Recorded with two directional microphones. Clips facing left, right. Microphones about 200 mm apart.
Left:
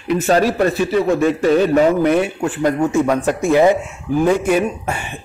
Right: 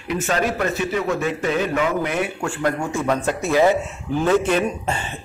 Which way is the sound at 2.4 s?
20° left (ahead or behind).